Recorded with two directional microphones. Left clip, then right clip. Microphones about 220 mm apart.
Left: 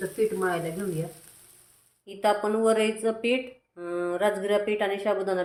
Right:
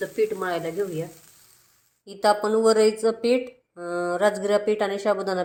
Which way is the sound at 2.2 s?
20° right (ahead or behind).